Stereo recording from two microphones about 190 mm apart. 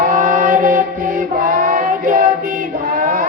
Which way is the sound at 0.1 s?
45° right (ahead or behind).